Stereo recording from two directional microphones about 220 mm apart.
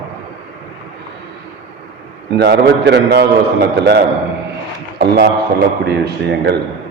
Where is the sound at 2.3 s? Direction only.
50° right (ahead or behind).